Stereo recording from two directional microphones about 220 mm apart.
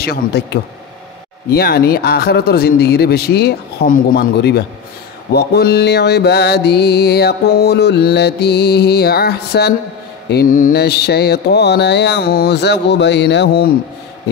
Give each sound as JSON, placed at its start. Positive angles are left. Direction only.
{"t": 0.0, "sound": "mantra", "side_deg": 45}